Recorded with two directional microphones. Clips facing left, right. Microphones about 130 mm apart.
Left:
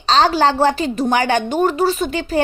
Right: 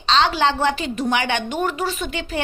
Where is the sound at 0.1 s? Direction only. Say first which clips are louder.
Left 4 dB; 40° left (ahead or behind).